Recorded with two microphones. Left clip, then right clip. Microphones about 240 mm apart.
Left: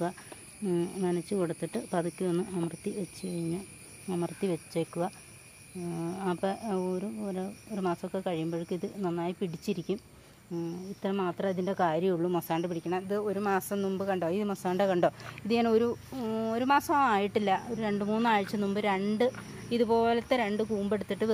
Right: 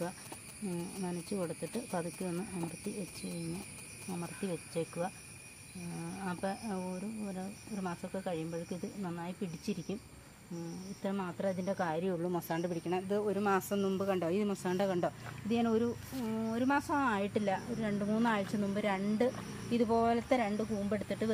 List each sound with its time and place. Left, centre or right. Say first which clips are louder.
0.7 s speech: left 11 dB; left
4.1 s speech: left 8 dB; left
6.1 s speech: left 6 dB; left
11.0 s speech: left 6 dB; left